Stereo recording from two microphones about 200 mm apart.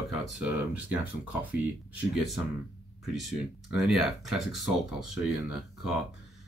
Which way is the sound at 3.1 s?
Centre (ahead or behind).